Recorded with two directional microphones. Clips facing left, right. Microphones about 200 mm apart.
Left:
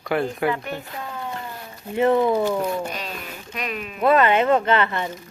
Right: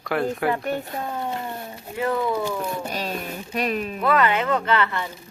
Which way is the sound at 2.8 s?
40° right (ahead or behind).